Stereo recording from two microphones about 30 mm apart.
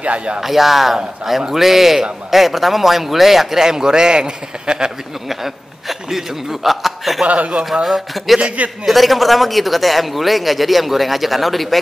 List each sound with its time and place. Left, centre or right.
0.0 s speech: right
0.4 s a man's voice: centre
3.6 s a man's voice: right
5.3 s a man's voice: centre
7.2 s speech: right
7.8 s a man's voice: centre
8.4 s speech: right
8.8 s a man's voice: centre